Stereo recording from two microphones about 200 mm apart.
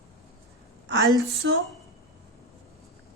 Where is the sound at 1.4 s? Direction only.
65° right (ahead or behind).